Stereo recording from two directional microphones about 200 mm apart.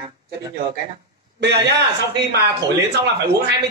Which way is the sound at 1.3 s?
55° right (ahead or behind).